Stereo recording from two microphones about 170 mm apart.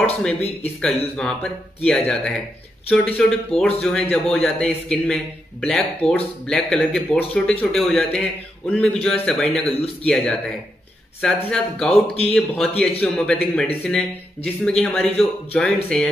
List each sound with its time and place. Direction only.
0.6 s a man's voice: 5° left (ahead or behind)
11.9 s speech: 35° left (ahead or behind)
12.4 s a man's voice: centre (ahead or behind)